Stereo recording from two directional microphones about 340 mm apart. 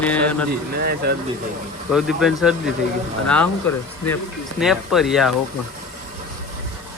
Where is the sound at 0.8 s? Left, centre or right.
Right.